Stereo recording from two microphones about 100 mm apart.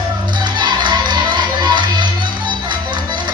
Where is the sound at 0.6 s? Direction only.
50° right (ahead or behind).